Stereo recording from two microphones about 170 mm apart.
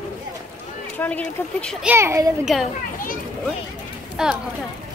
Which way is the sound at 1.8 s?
15° right (ahead or behind).